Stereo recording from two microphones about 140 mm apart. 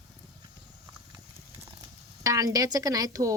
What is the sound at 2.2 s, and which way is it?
A woman's voice, 25° right (ahead or behind).